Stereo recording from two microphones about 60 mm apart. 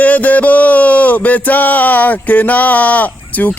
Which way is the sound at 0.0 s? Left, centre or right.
Left.